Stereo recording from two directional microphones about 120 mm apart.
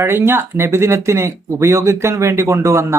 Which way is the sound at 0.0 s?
20° right (ahead or behind).